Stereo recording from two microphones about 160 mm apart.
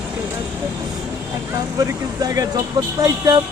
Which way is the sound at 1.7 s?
20° right (ahead or behind).